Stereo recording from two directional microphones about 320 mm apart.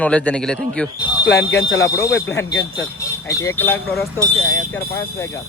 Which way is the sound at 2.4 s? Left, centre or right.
Left.